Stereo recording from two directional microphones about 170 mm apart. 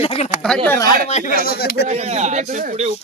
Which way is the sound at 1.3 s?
60° left (ahead or behind).